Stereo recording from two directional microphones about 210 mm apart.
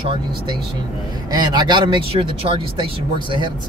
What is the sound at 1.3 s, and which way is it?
Speech, 20° right (ahead or behind).